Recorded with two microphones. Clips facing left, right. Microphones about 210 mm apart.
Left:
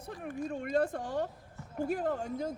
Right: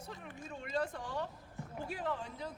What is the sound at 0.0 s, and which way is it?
Speech, 50° left (ahead or behind).